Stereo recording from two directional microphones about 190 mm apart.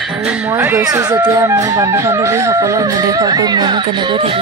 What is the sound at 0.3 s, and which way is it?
Speech, 15° right (ahead or behind).